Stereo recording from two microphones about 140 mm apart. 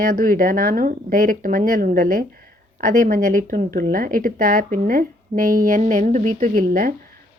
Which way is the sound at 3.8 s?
90° right.